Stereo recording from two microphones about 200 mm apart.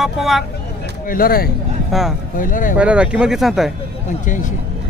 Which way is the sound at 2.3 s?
40° left (ahead or behind).